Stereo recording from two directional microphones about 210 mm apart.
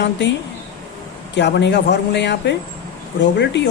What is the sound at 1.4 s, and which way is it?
Speech, 55° left (ahead or behind).